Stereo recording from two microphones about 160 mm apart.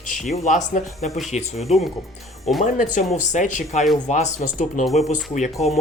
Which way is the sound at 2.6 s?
55° left (ahead or behind).